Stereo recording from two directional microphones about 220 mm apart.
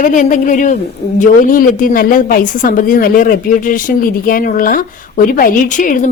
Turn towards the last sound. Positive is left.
turn(degrees=35)  # may be behind; listen again after turning